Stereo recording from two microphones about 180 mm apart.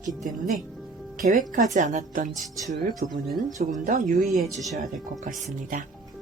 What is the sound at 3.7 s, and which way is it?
Speech, 45° right (ahead or behind).